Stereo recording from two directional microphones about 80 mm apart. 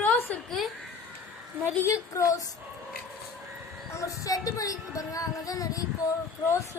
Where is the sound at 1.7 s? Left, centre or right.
Left.